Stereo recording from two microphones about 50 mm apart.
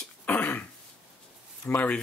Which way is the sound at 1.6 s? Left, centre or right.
Left.